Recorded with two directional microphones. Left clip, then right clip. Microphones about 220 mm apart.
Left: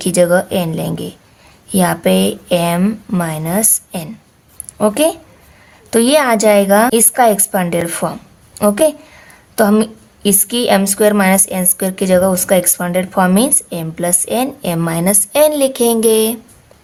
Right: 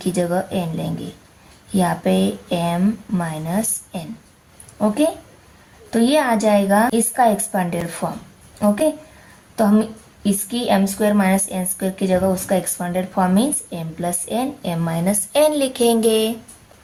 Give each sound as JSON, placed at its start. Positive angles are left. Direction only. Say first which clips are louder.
{"t": 0.0, "sound": "a woman's voice", "louder": "left 9 dB", "side_deg": 40}